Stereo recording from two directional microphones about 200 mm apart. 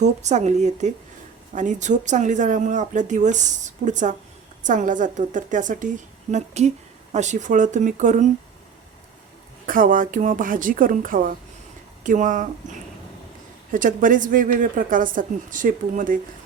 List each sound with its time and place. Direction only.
0.0 s speech: 35° right (ahead or behind)
9.6 s a woman's voice: 45° right (ahead or behind)
13.7 s speech: 40° right (ahead or behind)